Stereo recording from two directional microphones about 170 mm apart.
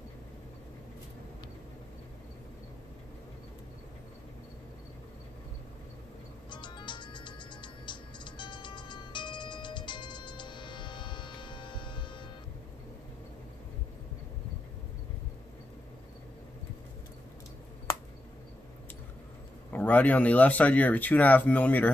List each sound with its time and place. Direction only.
6.5 s music: 25° left (ahead or behind)
19.7 s speech: 10° left (ahead or behind)